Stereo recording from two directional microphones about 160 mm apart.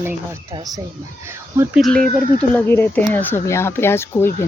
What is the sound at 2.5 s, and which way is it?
Speech, 15° left (ahead or behind).